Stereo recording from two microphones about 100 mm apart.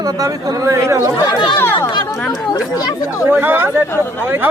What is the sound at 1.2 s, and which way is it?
Speech, 45° left (ahead or behind).